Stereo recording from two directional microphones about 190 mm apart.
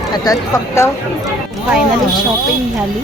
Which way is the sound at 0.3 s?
15° left (ahead or behind).